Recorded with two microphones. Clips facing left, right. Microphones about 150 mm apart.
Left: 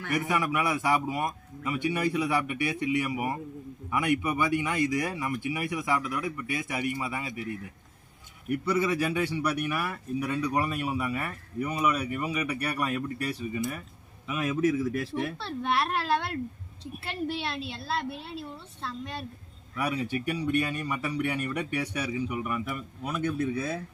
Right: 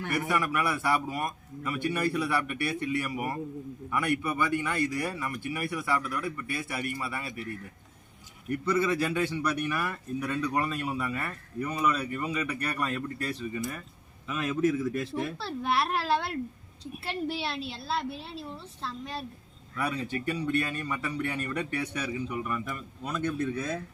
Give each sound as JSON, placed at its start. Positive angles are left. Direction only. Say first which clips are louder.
{"t": 0.1, "sound": "speech", "louder": "left 2 dB", "side_deg": 15}
{"t": 8.4, "sound": "a woman's voice", "louder": "even", "side_deg": 10}
{"t": 19.7, "sound": "speech", "louder": "left 2 dB", "side_deg": 15}